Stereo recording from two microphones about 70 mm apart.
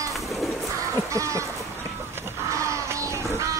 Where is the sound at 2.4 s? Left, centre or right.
Right.